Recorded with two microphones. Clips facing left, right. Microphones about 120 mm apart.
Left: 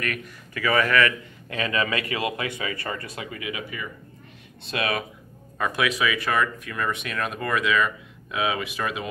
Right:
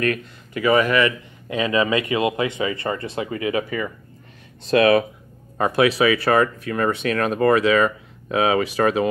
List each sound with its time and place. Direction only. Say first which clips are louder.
0.0 s speech: right 8 dB; 25° right (ahead or behind)